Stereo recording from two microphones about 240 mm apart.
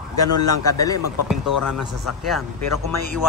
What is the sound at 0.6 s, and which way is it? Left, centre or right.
Speech, centre.